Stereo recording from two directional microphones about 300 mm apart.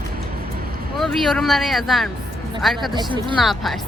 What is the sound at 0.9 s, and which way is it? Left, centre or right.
A woman's voice, centre.